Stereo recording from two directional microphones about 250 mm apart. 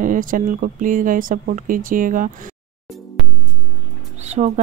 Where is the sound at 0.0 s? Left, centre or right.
Right.